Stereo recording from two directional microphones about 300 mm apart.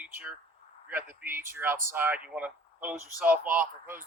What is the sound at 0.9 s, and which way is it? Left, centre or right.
Speech, centre.